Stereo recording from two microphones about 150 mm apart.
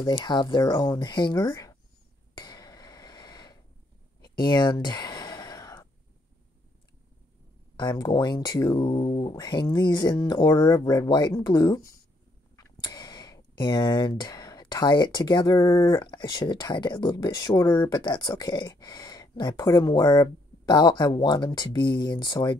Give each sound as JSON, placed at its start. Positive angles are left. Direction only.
{"t": 0.0, "sound": "speech", "side_deg": 30}
{"t": 2.3, "sound": "a sound", "side_deg": 25}
{"t": 4.4, "sound": "sigh", "side_deg": 25}
{"t": 7.7, "sound": "speech", "side_deg": 25}